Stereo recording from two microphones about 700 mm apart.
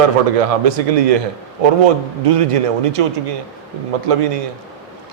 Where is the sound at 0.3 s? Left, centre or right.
Right.